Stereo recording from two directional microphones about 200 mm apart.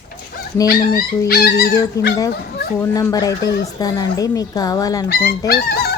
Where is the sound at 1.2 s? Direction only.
50° left (ahead or behind).